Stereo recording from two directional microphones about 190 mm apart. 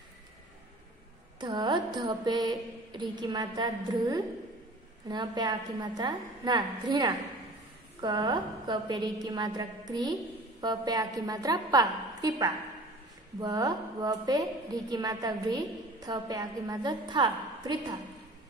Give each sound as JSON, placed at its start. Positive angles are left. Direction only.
{"t": 1.4, "sound": "a woman's voice", "side_deg": -25}